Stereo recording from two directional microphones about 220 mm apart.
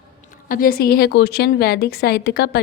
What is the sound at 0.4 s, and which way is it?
A woman's voice, 40° left (ahead or behind).